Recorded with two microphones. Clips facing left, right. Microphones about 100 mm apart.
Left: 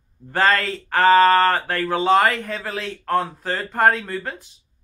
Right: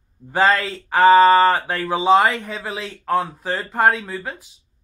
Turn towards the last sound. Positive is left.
turn(degrees=-5)  # may be behind; listen again after turning